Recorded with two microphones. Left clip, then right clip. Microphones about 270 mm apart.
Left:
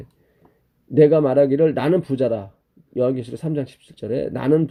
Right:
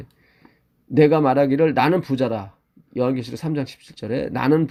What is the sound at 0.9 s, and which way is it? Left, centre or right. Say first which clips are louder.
Speech: left 2 dB; right.